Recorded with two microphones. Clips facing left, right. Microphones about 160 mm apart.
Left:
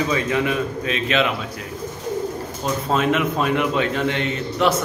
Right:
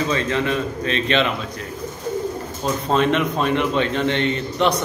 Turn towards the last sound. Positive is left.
turn(degrees=5)  # may be behind; listen again after turning